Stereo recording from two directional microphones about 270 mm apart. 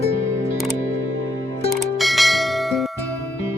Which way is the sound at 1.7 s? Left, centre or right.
Centre.